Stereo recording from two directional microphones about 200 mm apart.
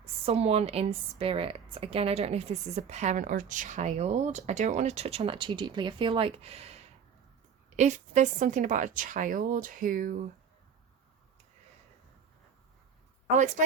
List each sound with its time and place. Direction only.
0.0 s a woman's voice: 30° right (ahead or behind)
13.3 s speech: 40° right (ahead or behind)